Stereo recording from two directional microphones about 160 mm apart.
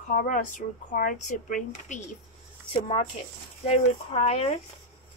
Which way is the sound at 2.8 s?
40° left (ahead or behind).